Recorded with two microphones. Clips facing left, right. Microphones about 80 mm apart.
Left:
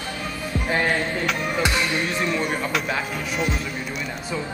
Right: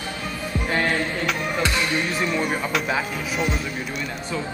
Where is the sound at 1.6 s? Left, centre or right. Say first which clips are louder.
Left 1 dB; centre.